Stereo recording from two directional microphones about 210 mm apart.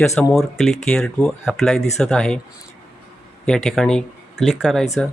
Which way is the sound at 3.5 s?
Centre (ahead or behind).